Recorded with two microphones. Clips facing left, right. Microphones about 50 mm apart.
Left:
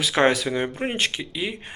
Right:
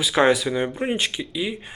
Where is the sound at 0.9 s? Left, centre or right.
Left.